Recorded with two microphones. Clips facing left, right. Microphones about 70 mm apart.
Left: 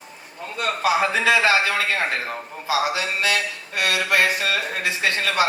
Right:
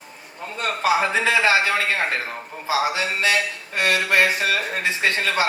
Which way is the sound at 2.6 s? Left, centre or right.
Right.